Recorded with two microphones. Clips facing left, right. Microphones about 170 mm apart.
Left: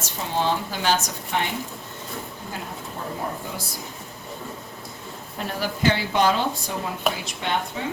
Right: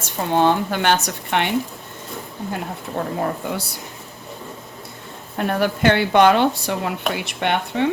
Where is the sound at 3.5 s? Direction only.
70° right (ahead or behind).